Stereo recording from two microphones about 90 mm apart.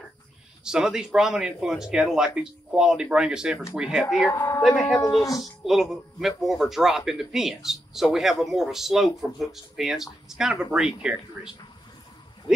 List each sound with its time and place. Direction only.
0.7 s speech: 5° right (ahead or behind)
4.3 s speech: 30° left (ahead or behind)
4.6 s speech: 10° left (ahead or behind)
5.4 s speech: 5° right (ahead or behind)